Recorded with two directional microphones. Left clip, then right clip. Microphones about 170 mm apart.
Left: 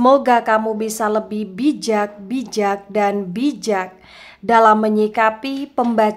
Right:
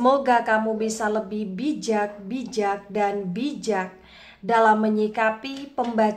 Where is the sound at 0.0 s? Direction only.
40° left (ahead or behind).